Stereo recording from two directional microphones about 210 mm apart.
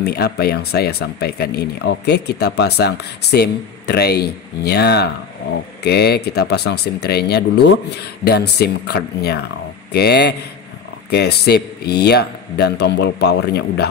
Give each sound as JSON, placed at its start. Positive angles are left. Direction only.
{"t": 0.0, "sound": "speech", "side_deg": 50}